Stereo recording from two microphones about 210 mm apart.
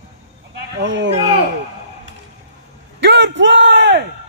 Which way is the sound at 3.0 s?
55° right (ahead or behind).